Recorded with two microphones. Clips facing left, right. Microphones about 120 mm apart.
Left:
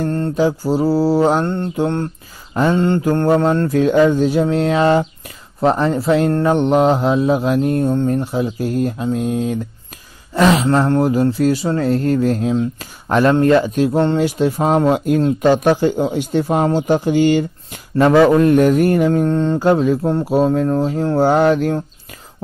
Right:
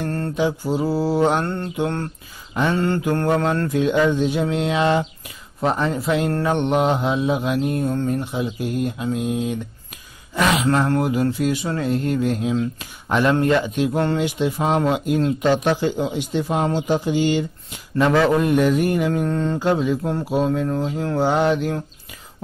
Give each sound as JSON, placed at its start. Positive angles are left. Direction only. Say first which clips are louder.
{"t": 0.4, "sound": "speech", "louder": "left 5 dB", "side_deg": 35}
{"t": 1.4, "sound": "mantra", "louder": "left 5 dB", "side_deg": 20}
{"t": 3.7, "sound": "speech", "louder": "left 5 dB", "side_deg": 45}
{"t": 18.6, "sound": "speech", "louder": "left 5 dB", "side_deg": 45}
{"t": 19.6, "sound": "speech", "louder": "left 6 dB", "side_deg": 45}